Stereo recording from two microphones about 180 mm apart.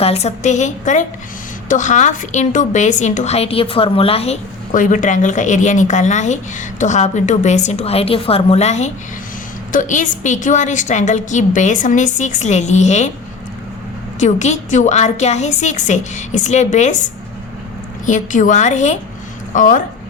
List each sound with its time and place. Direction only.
0.0 s a woman's voice: 35° left (ahead or behind)
14.2 s a woman's voice: 40° left (ahead or behind)